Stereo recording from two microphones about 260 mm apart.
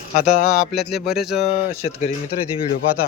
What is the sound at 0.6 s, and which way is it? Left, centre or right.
Speech, centre.